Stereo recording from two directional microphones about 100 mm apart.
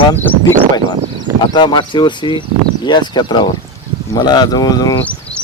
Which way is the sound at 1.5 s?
50° left (ahead or behind).